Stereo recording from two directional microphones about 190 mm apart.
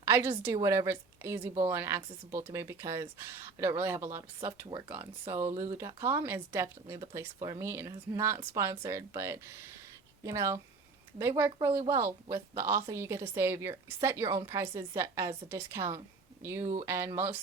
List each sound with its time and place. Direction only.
0.0 s a woman's voice: 10° right (ahead or behind)